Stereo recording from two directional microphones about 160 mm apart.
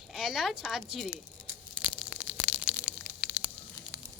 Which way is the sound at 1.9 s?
5° right (ahead or behind).